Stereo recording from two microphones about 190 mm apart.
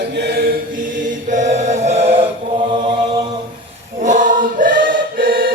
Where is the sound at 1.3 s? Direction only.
40° right (ahead or behind).